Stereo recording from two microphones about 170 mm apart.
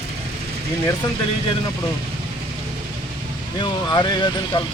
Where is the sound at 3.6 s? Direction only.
25° left (ahead or behind).